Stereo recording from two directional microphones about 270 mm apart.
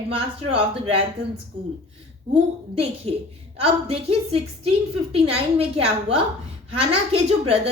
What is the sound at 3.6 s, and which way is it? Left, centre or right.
A woman's voice, right.